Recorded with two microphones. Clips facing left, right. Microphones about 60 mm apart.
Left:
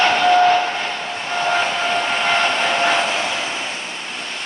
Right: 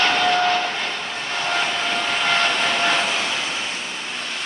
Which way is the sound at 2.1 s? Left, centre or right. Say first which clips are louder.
Even; left.